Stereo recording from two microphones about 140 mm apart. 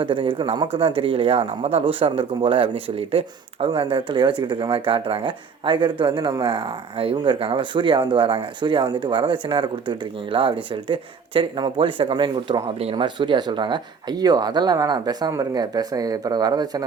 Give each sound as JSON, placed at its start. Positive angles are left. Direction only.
{"t": 0.0, "sound": "speech", "side_deg": -40}